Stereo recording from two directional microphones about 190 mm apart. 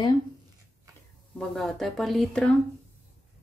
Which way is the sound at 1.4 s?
Centre (ahead or behind).